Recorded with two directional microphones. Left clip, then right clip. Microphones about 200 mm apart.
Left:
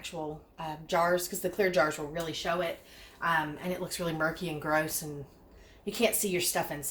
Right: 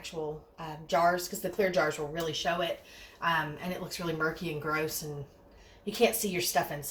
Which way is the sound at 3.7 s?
40° left (ahead or behind).